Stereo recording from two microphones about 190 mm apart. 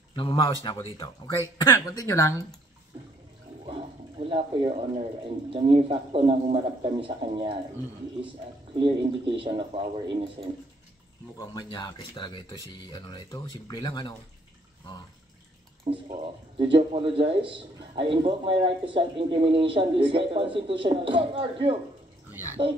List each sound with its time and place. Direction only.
0.1 s speech: 25° left (ahead or behind)
3.6 s a sound: 30° right (ahead or behind)
5.5 s a man's voice: 30° right (ahead or behind)
8.7 s a man's voice: 25° right (ahead or behind)
11.3 s speech: 20° left (ahead or behind)
16.1 s a man's voice: 25° right (ahead or behind)